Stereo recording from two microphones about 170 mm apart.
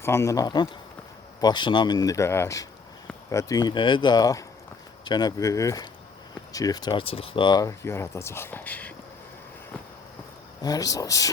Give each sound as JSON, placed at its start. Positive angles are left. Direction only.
{"t": 0.0, "sound": "speech", "side_deg": 15}
{"t": 10.6, "sound": "speech", "side_deg": 20}